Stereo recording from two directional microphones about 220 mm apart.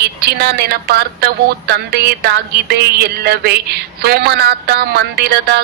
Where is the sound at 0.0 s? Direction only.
45° right (ahead or behind).